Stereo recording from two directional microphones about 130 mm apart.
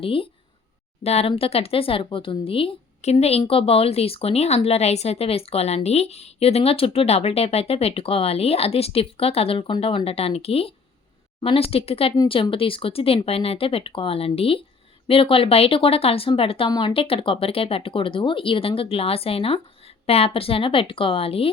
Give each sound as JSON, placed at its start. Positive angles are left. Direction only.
{"t": 0.0, "sound": "a woman's voice", "side_deg": 45}